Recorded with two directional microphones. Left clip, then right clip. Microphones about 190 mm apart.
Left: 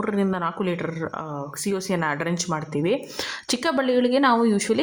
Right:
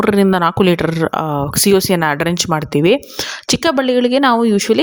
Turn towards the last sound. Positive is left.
turn(degrees=-40)  # may be behind; listen again after turning